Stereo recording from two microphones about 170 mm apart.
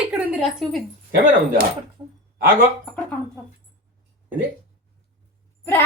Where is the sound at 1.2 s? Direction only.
55° right (ahead or behind).